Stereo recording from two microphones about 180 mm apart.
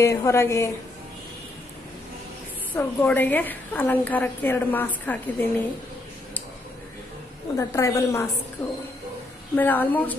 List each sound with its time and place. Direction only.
0.0 s a woman's voice: 15° left (ahead or behind)
2.7 s a woman's voice: 10° left (ahead or behind)
7.5 s a woman's voice: 15° left (ahead or behind)
9.6 s a woman's voice: 10° left (ahead or behind)